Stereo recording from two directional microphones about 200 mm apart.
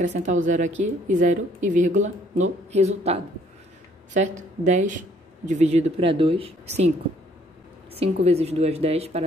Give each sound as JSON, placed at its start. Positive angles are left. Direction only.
{"t": 0.2, "sound": "a woman's voice", "side_deg": -35}
{"t": 7.9, "sound": "a woman's voice", "side_deg": -30}